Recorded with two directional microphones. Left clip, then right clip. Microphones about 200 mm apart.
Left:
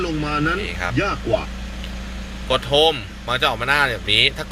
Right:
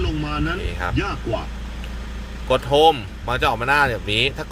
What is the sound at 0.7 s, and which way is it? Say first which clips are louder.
Speech: left 1 dB; 25° right (ahead or behind).